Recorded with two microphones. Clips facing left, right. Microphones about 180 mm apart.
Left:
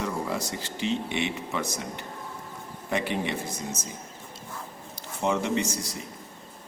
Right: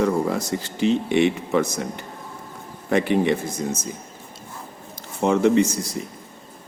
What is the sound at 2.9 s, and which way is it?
Speech, 50° right (ahead or behind).